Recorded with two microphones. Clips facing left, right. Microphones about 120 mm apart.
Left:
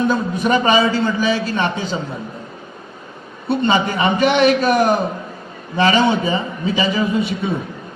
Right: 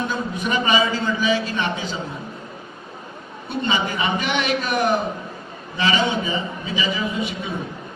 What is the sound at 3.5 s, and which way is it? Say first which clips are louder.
A man's voice: left 7 dB; 40° left (ahead or behind).